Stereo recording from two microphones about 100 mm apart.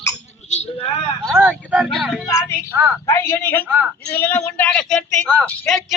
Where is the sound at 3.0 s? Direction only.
25° left (ahead or behind); by 5.8 s 10° left (ahead or behind).